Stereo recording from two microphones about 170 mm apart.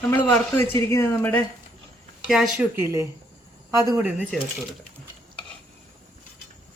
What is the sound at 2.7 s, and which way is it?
Speech, 15° right (ahead or behind).